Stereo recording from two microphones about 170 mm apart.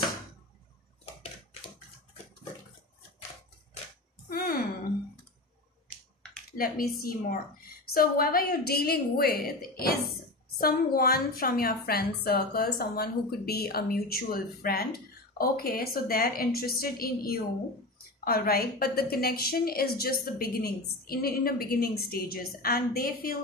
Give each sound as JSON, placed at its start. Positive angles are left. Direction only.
{"t": 6.5, "sound": "a woman's voice", "side_deg": 55}